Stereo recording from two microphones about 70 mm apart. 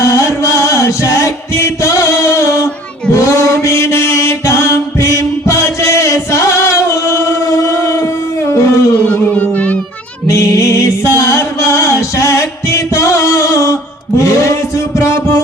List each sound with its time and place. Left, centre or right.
0.0 s chant: left
3.1 s mantra: left
9.0 s music: left
10.2 s music: left